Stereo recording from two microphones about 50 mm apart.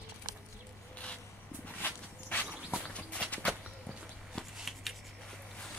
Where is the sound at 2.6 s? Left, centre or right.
Centre.